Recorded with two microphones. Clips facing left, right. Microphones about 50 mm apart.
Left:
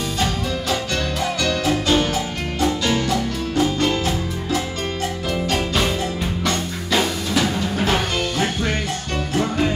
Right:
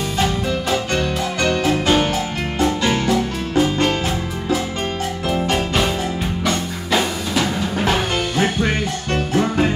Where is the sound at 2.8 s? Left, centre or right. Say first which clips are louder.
Right 2 dB; right.